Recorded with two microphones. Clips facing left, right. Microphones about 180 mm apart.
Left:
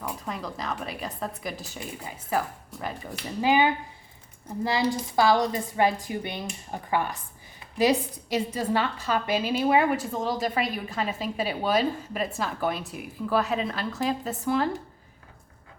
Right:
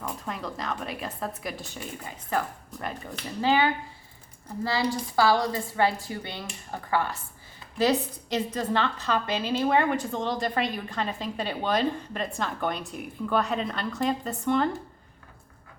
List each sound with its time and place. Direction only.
0.3 s a woman's voice: centre (ahead or behind)